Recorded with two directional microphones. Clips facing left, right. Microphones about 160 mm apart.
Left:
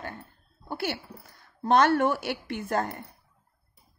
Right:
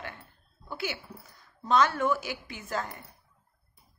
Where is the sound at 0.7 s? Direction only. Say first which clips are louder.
Left 4 dB; 60° left (ahead or behind).